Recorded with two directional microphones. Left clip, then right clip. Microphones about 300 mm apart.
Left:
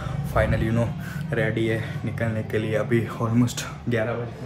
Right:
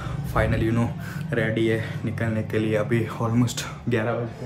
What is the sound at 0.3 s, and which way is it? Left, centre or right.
Speech, centre.